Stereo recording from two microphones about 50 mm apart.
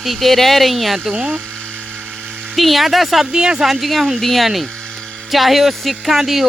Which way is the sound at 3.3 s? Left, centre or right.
Centre.